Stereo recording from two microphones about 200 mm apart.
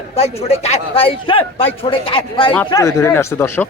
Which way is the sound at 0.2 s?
30° left (ahead or behind).